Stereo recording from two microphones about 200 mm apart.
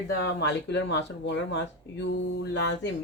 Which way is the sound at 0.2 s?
60° left (ahead or behind).